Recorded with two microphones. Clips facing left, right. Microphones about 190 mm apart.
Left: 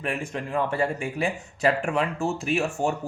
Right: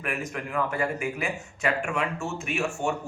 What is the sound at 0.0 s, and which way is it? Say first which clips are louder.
A man's voice: left 2 dB; 30° left (ahead or behind).